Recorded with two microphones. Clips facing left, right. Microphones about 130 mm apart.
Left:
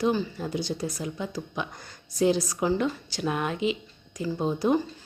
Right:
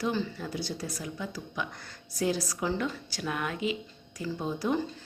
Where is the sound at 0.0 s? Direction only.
15° left (ahead or behind).